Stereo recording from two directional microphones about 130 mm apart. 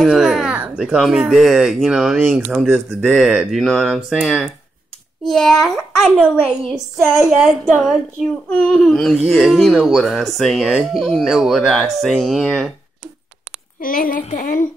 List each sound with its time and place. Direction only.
0.0 s speech: 5° right (ahead or behind)
7.2 s speech: 5° right (ahead or behind)
8.5 s speech: 5° left (ahead or behind)
13.7 s speech: 90° left
14.2 s speech: 75° left (ahead or behind)